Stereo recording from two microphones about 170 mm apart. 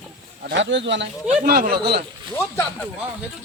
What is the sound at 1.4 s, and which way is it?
Speech, 65° right (ahead or behind).